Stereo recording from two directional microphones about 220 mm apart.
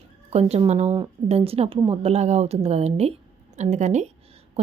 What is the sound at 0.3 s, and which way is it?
A woman's voice, 30° right (ahead or behind).